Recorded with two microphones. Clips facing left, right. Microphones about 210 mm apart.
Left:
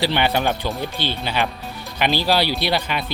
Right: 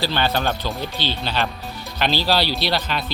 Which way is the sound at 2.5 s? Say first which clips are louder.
Left 1 dB; 50° left (ahead or behind).